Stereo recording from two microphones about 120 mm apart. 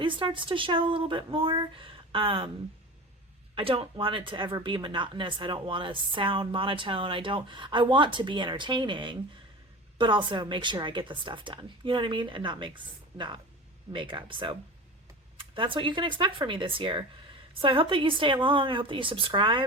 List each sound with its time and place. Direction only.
0.0 s speech: 45° right (ahead or behind)
3.5 s speech: 50° right (ahead or behind)